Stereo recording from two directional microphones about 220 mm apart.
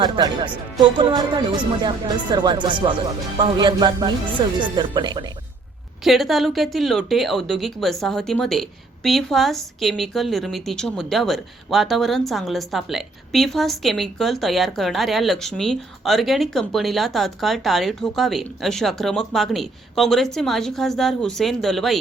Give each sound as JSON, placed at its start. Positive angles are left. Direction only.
{"t": 0.0, "sound": "speech", "side_deg": -20}
{"t": 6.1, "sound": "speech", "side_deg": 0}